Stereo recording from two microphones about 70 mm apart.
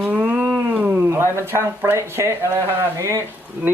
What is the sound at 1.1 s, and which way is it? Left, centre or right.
Speech, right.